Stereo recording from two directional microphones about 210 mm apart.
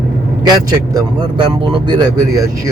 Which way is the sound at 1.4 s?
25° right (ahead or behind).